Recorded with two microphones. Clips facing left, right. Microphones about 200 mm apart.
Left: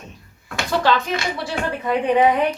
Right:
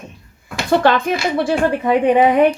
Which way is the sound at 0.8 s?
55° right (ahead or behind).